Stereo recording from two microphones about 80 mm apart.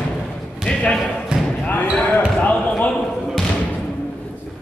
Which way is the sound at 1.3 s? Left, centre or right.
Centre.